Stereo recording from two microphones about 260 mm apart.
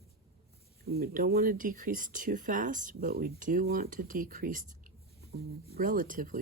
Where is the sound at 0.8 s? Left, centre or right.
Right.